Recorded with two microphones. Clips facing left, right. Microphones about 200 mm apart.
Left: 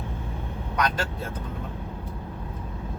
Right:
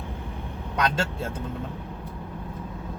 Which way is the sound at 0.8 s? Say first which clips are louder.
Right 1 dB; 25° right (ahead or behind).